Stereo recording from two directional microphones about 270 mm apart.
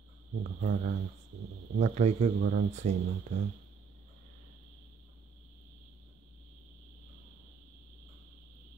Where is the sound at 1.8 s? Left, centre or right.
Right.